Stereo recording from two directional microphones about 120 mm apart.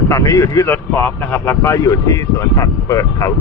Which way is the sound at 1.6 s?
25° left (ahead or behind).